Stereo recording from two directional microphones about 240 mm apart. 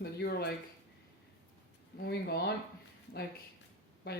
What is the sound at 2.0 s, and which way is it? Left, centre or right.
Speech, left.